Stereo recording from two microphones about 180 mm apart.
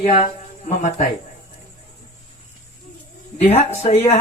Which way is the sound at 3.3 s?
35° left (ahead or behind).